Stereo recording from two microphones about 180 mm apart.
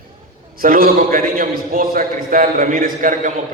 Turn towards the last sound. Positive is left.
turn(degrees=-45)  # may be behind; listen again after turning